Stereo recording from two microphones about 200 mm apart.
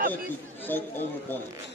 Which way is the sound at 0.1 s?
10° left (ahead or behind).